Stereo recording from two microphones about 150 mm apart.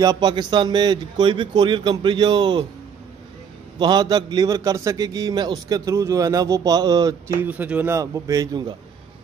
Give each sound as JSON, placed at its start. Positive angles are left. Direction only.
{"t": 0.0, "sound": "a man's voice", "side_deg": -25}
{"t": 3.8, "sound": "a man's voice", "side_deg": -30}
{"t": 7.4, "sound": "a man's voice", "side_deg": -10}